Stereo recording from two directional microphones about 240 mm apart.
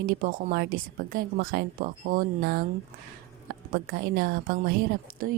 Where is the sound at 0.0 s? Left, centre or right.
Right.